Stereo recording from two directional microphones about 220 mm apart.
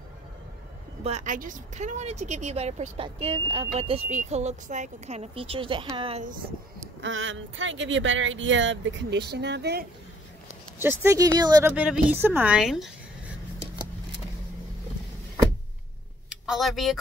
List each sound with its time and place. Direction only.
1.0 s speech: 35° right (ahead or behind)
7.0 s speech: 60° right (ahead or behind)
10.8 s a woman's voice: 10° right (ahead or behind)
16.4 s speech: centre (ahead or behind)